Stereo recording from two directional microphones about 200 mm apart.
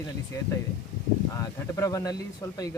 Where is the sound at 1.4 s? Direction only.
15° left (ahead or behind).